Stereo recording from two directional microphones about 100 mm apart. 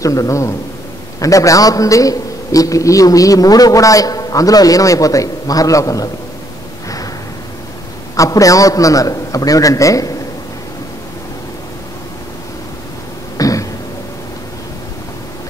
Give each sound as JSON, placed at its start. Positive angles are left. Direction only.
{"t": 0.0, "sound": "a man's voice", "side_deg": 35}
{"t": 8.2, "sound": "a man's voice", "side_deg": 35}
{"t": 13.4, "sound": "a sound", "side_deg": 35}